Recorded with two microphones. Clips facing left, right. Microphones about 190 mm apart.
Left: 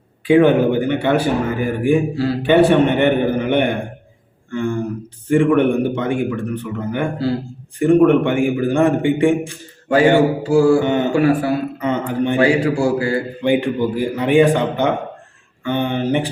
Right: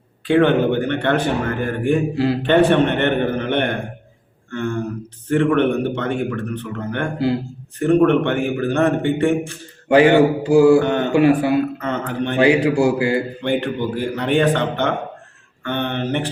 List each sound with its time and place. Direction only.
0.3 s speech: 10° left (ahead or behind)
9.9 s a man's voice: 20° right (ahead or behind)
10.8 s speech: 5° left (ahead or behind)
11.1 s a man's voice: 20° right (ahead or behind)
11.8 s speech: 10° left (ahead or behind)
12.4 s a man's voice: 20° right (ahead or behind)
13.4 s speech: 10° left (ahead or behind)